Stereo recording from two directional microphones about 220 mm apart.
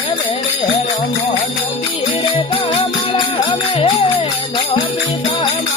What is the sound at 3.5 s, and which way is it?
Music, 25° left (ahead or behind).